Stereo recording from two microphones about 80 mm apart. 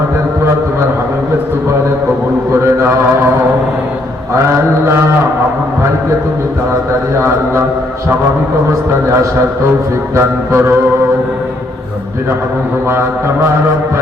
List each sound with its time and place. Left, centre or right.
10.2 s music: right